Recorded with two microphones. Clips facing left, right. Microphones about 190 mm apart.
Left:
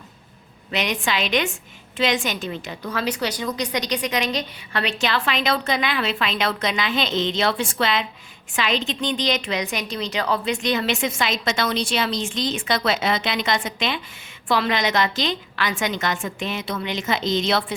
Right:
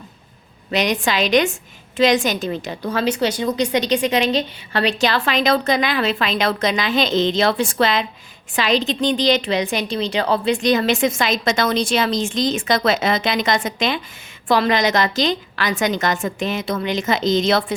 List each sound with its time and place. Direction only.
0.7 s a woman's voice: 40° right (ahead or behind)